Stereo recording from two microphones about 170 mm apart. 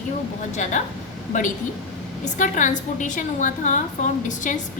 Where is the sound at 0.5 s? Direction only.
45° left (ahead or behind).